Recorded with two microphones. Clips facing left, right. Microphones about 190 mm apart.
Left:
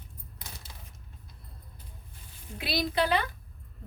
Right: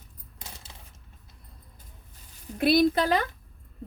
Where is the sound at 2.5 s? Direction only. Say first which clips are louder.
Right 8 dB; 50° right (ahead or behind).